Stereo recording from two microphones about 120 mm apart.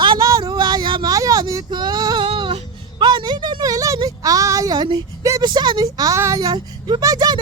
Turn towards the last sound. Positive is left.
turn(degrees=-35)  # may be behind; listen again after turning